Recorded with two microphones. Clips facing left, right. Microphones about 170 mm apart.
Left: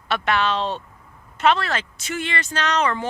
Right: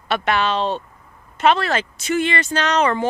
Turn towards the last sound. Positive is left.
turn(degrees=-20)  # may be behind; listen again after turning